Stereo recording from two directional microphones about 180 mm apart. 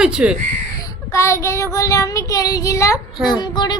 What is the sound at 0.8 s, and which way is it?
Child singing, 15° left (ahead or behind).